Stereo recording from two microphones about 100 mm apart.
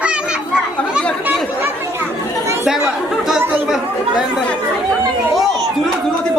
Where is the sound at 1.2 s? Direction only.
15° right (ahead or behind).